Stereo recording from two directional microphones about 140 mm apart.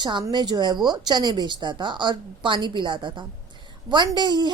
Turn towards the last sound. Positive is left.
turn(degrees=-35)  # may be behind; listen again after turning